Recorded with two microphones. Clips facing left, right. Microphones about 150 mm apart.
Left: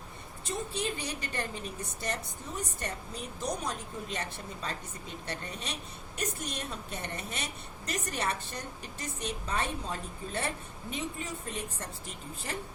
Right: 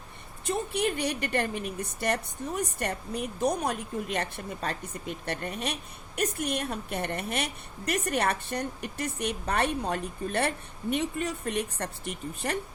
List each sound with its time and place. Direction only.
0.4 s a woman's voice: 60° right (ahead or behind)